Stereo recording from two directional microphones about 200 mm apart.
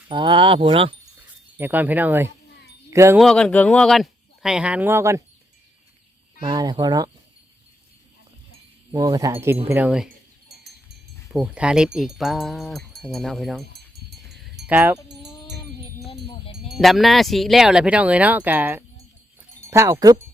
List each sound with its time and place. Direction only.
0.1 s speech: 25° right (ahead or behind)
1.5 s speech: 10° right (ahead or behind)
3.2 s speech: 5° left (ahead or behind); by 5.2 s 15° right (ahead or behind)
6.4 s speech: 20° right (ahead or behind)
8.9 s speech: 20° right (ahead or behind)
10.1 s wind chime: 55° right (ahead or behind)
11.3 s speech: 5° right (ahead or behind)
13.7 s a sound: 55° right (ahead or behind)
14.7 s speech: 10° right (ahead or behind)
16.7 s speech: centre (ahead or behind); by 20.2 s 15° right (ahead or behind)